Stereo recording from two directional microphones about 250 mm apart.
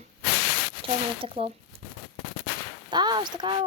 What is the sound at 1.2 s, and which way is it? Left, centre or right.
Speech, right.